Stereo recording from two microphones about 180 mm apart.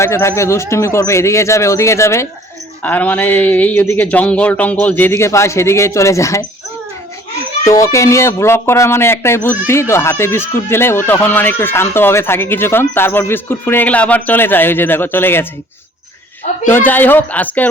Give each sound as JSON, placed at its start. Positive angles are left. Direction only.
{"t": 0.0, "sound": "speech", "side_deg": 15}
{"t": 7.7, "sound": "speech", "side_deg": 15}
{"t": 16.6, "sound": "speech", "side_deg": 10}